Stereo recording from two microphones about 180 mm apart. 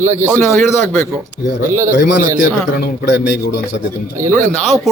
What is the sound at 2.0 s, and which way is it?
A man's voice, 65° left (ahead or behind).